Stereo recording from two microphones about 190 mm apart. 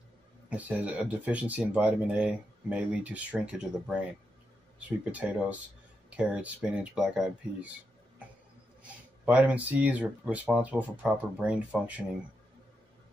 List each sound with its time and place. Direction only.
0.5 s speech: 10° right (ahead or behind)
8.8 s speech: 5° right (ahead or behind)